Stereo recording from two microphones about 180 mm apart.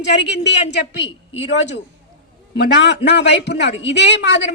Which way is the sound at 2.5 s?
75° left (ahead or behind).